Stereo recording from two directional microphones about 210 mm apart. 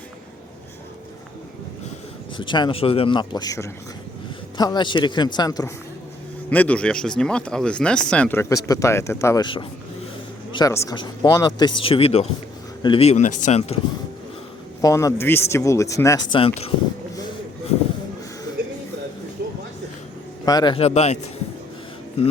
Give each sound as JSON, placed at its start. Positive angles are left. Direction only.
{"t": 2.4, "sound": "a man's voice", "side_deg": 20}
{"t": 14.8, "sound": "speech", "side_deg": 15}
{"t": 20.4, "sound": "speech", "side_deg": 20}